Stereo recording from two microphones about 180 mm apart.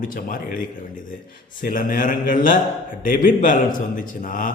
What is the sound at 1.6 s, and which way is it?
Speech, 50° left (ahead or behind).